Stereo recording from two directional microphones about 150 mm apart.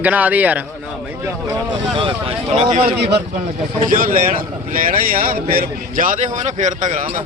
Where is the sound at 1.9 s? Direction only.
35° right (ahead or behind).